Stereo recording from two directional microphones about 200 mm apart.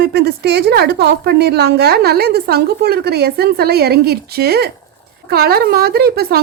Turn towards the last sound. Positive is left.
turn(degrees=-50)  # may be behind; listen again after turning